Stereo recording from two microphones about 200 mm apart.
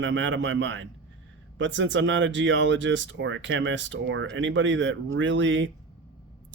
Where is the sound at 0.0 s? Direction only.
70° right (ahead or behind).